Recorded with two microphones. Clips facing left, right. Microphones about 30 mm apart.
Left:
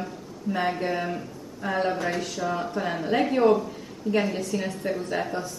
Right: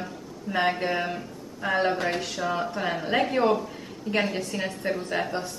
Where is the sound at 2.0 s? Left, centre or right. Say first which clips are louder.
Even; right.